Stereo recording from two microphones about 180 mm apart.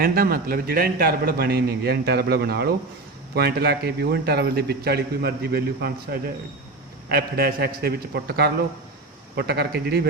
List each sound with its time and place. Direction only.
0.0 s speech: 55° right (ahead or behind)